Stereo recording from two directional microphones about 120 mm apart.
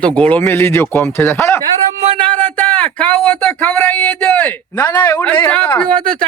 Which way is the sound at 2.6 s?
15° left (ahead or behind).